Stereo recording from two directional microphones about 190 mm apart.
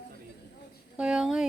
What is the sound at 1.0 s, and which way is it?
Speech, 5° right (ahead or behind).